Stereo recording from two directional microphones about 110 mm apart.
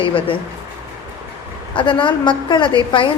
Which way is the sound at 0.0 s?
55° left (ahead or behind).